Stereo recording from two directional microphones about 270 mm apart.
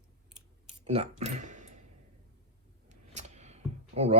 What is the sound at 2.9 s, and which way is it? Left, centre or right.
Clicking, right.